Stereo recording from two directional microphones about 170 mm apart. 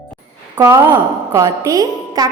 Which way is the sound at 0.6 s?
20° right (ahead or behind).